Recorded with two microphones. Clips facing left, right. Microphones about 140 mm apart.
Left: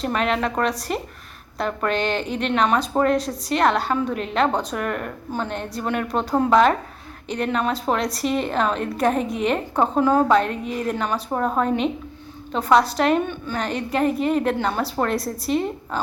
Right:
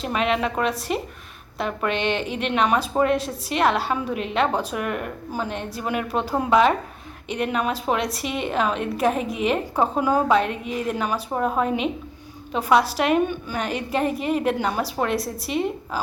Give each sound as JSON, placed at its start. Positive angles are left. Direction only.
{"t": 0.0, "sound": "a woman's voice", "side_deg": -5}
{"t": 10.4, "sound": "a woman's voice", "side_deg": 35}
{"t": 10.9, "sound": "a woman's voice", "side_deg": -10}